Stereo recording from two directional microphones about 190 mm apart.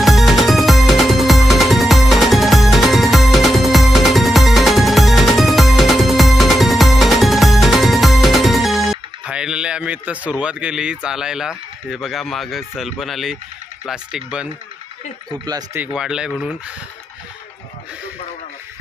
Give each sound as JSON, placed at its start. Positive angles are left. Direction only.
{"t": 0.0, "sound": "music", "side_deg": 0}
{"t": 10.4, "sound": "speech", "side_deg": -5}
{"t": 15.4, "sound": "speech", "side_deg": -20}
{"t": 15.8, "sound": "speech", "side_deg": -5}